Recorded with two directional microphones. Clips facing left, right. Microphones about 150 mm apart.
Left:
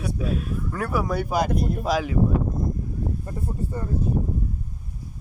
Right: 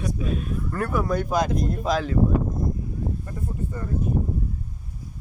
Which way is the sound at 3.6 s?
35° left (ahead or behind).